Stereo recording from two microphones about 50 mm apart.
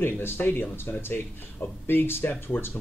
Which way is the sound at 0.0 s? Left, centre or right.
Left.